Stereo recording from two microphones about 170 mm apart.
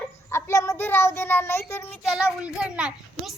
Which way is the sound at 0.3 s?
15° left (ahead or behind).